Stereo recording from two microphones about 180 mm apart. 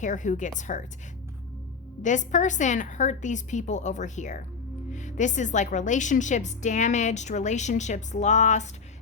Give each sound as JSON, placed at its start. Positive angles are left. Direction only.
{"t": 0.0, "sound": "a woman's voice", "side_deg": 45}
{"t": 2.0, "sound": "a woman's voice", "side_deg": 45}